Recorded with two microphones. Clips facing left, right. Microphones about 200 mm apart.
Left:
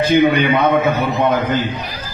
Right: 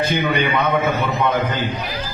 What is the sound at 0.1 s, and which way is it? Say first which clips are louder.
Speech: left 7 dB; 55° left (ahead or behind).